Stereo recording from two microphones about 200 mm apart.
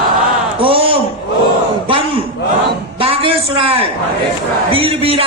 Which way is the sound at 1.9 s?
25° right (ahead or behind).